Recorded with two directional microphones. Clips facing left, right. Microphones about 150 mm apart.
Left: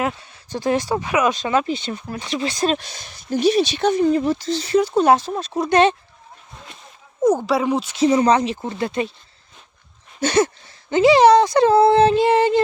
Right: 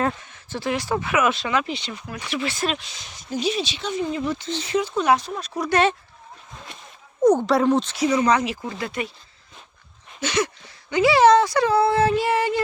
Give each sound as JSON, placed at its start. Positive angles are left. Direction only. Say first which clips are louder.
{"t": 0.6, "sound": "speech", "louder": "left 6 dB", "side_deg": 45}
{"t": 0.9, "sound": "speech", "louder": "left 2 dB", "side_deg": 15}
{"t": 1.2, "sound": "speech", "louder": "left 3 dB", "side_deg": 40}
{"t": 7.2, "sound": "speech", "louder": "even", "side_deg": 5}
{"t": 7.9, "sound": "speech", "louder": "left 4 dB", "side_deg": 30}
{"t": 10.4, "sound": "speech", "louder": "left 5 dB", "side_deg": 25}